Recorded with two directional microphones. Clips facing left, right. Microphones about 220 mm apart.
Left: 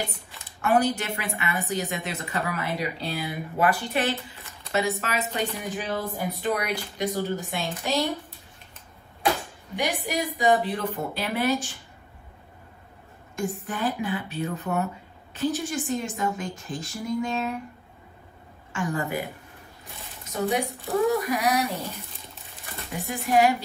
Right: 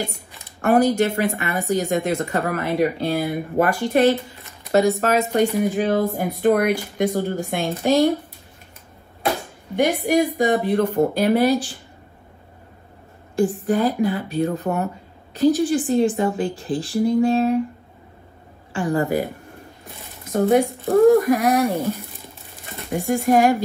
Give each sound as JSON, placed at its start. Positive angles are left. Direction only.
{"t": 0.6, "sound": "speech", "side_deg": -45}
{"t": 9.8, "sound": "speech", "side_deg": -50}
{"t": 13.7, "sound": "speech", "side_deg": -40}
{"t": 18.7, "sound": "speech", "side_deg": -35}
{"t": 20.3, "sound": "speech", "side_deg": -50}